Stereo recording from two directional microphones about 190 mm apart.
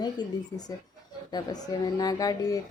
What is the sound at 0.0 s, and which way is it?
Speech, 20° left (ahead or behind).